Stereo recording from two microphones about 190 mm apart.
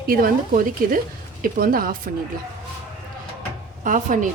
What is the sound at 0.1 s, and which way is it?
Speech, 50° right (ahead or behind).